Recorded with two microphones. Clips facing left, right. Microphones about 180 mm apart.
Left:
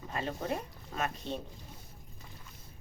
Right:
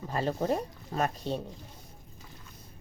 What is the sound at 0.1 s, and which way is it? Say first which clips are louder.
Speech: right 6 dB; 35° right (ahead or behind).